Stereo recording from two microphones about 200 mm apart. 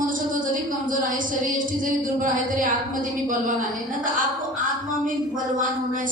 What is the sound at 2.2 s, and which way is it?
A woman's voice, 40° right (ahead or behind).